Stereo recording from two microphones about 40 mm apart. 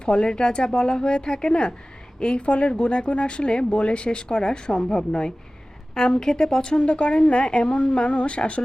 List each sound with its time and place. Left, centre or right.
0.0 s speech: left